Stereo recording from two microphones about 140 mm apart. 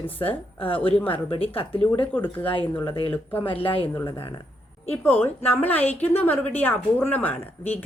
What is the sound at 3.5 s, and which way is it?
Speech, 40° left (ahead or behind).